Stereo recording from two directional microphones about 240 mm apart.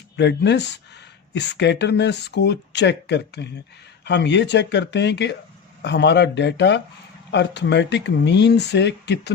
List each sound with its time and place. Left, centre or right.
0.2 s speech: left